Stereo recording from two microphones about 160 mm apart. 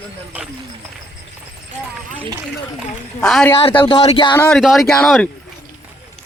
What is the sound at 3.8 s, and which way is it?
Speech, 35° left (ahead or behind).